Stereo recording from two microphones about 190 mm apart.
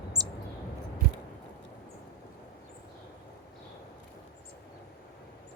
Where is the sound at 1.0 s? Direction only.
55° right (ahead or behind).